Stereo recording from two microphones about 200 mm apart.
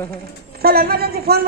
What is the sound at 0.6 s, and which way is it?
Speech, 50° right (ahead or behind).